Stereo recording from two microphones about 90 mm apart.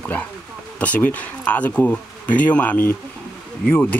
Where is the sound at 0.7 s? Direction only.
15° left (ahead or behind).